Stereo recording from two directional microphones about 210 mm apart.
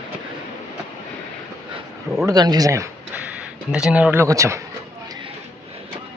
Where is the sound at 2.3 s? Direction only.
20° right (ahead or behind).